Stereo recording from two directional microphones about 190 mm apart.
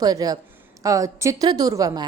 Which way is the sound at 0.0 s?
20° right (ahead or behind).